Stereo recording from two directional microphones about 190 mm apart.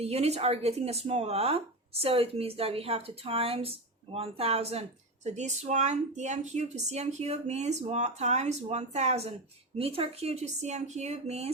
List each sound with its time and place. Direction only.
0.0 s speech: 35° right (ahead or behind)